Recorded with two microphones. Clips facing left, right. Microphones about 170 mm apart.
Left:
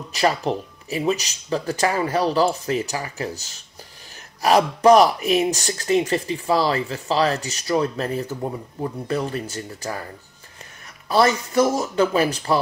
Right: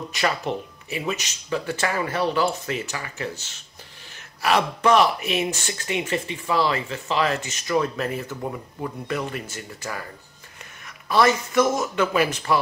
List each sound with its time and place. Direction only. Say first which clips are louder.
0.1 s speech: left 5 dB; 35° left (ahead or behind)
11.1 s speech: left 1 dB; 35° left (ahead or behind)